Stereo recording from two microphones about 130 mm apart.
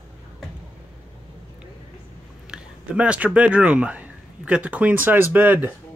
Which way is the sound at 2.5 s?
10° right (ahead or behind).